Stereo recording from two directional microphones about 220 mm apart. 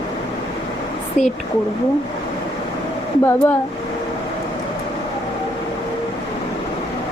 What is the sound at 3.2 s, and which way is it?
Speech, 10° left (ahead or behind).